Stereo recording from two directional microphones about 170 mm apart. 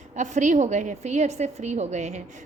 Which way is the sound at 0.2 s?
45° right (ahead or behind).